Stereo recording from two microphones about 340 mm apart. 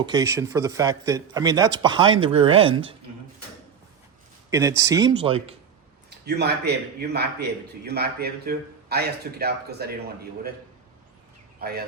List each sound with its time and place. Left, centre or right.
0.0 s a man's voice: centre
4.5 s a man's voice: centre
6.1 s a man's voice: right
11.6 s a man's voice: right